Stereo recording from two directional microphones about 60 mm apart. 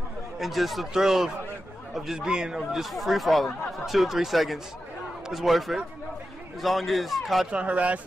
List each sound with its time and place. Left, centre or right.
0.4 s speech: centre
7.5 s speech: right